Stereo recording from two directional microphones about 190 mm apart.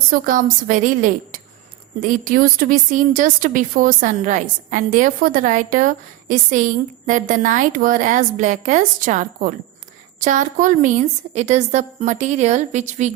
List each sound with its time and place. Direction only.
0.1 s a woman's voice: 45° right (ahead or behind)